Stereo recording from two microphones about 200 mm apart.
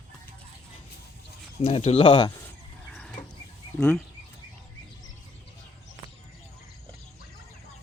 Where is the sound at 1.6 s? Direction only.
30° left (ahead or behind).